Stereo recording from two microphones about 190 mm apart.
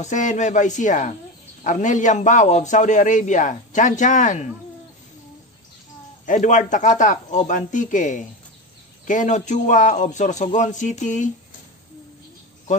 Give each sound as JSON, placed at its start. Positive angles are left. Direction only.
{"t": 0.0, "sound": "a man's voice", "side_deg": 40}
{"t": 6.2, "sound": "a man's voice", "side_deg": 40}